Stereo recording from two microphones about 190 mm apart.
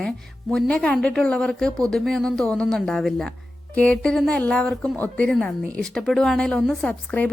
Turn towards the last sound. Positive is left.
turn(degrees=5)  # may be behind; listen again after turning